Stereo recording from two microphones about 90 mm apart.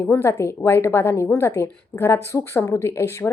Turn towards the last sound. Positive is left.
turn(degrees=30)  # may be behind; listen again after turning